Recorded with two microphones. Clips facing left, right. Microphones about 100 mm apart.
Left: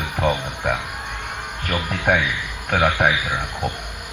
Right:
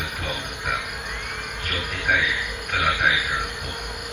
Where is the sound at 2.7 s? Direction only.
55° left (ahead or behind).